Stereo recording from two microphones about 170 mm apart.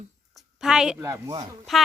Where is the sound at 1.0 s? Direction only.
20° right (ahead or behind).